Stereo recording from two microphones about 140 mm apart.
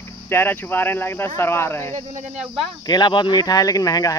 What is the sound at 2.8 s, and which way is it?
Speech, 30° left (ahead or behind).